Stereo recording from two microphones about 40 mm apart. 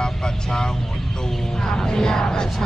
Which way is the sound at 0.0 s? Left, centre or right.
Centre.